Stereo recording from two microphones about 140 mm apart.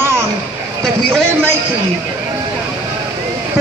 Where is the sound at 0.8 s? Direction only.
Centre (ahead or behind).